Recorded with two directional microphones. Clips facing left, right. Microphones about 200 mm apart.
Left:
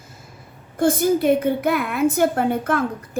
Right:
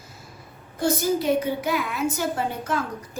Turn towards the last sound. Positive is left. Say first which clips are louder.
# left 6 dB
turn(degrees=55)  # may be behind; listen again after turning